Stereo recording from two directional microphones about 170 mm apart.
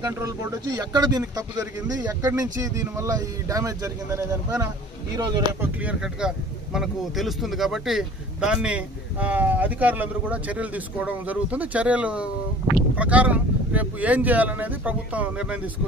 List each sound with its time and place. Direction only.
0.0 s speech: 20° right (ahead or behind)
5.6 s speech: 5° right (ahead or behind)